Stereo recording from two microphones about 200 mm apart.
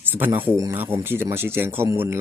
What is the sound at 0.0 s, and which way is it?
Speech, 10° right (ahead or behind).